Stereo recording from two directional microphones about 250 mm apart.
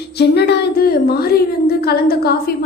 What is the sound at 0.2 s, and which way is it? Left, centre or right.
A woman's voice, left.